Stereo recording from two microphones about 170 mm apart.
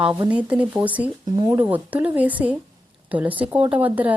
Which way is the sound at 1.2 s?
25° right (ahead or behind).